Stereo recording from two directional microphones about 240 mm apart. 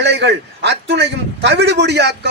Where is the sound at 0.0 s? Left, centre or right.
Right.